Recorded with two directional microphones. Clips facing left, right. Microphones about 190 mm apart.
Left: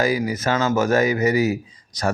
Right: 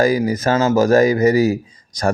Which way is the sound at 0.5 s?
30° right (ahead or behind).